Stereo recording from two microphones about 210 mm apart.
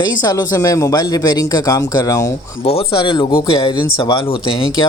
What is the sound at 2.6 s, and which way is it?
Speech, 30° left (ahead or behind).